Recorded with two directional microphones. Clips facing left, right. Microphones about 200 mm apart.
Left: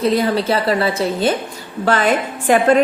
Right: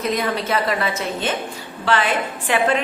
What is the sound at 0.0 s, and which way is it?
A woman's voice, 30° left (ahead or behind).